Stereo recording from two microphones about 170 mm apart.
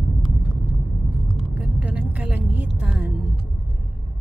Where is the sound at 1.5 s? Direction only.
10° right (ahead or behind).